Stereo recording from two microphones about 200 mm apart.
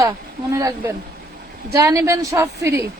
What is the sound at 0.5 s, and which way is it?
A woman's voice, 15° right (ahead or behind).